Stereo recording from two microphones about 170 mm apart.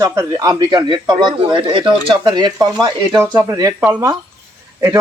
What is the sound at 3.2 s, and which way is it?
Speech, 15° right (ahead or behind).